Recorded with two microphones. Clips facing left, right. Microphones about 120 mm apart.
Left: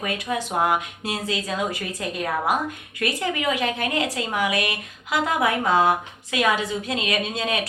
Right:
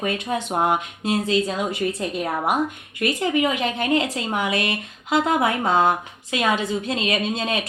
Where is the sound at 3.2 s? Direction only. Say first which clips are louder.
Right 3 dB; 25° right (ahead or behind).